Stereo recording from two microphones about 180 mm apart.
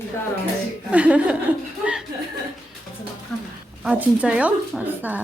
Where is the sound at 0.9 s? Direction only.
10° right (ahead or behind).